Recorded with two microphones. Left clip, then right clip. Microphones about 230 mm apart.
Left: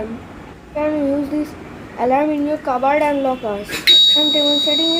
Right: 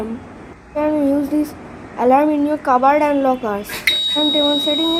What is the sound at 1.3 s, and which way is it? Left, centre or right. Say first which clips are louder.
A woman's voice: right 3 dB; right.